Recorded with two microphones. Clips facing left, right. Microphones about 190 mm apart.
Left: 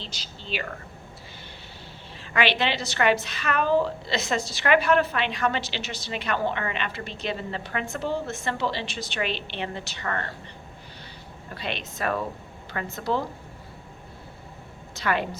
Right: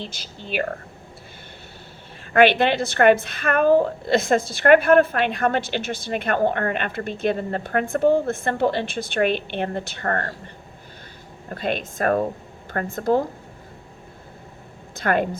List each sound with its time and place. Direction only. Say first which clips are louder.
0.0 s a woman's voice: right 6 dB; 50° right (ahead or behind)
2.2 s a woman's voice: right 8 dB; 55° right (ahead or behind)
11.4 s a woman's voice: right 8 dB; 50° right (ahead or behind)
14.9 s a woman's voice: right 5 dB; 50° right (ahead or behind)